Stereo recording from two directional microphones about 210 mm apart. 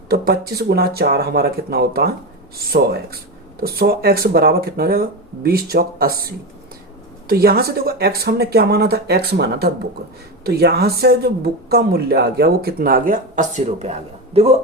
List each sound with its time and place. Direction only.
0.1 s a man's voice: 50° right (ahead or behind); by 14.5 s 30° right (ahead or behind)